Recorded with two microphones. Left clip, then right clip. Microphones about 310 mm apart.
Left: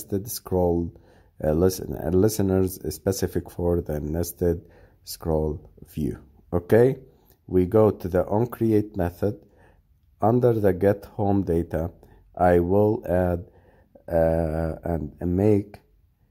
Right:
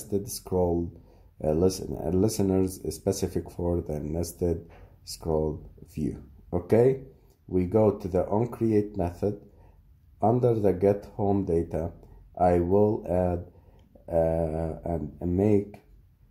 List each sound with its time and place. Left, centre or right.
0.1 s speech: left